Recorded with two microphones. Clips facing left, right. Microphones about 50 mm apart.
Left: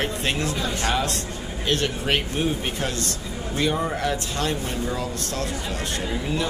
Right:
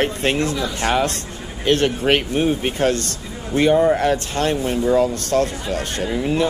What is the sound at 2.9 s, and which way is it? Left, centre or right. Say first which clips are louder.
Speech: right 6 dB; right.